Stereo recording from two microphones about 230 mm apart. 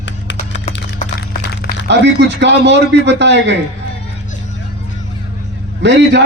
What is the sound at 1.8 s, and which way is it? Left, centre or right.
A man's voice, right.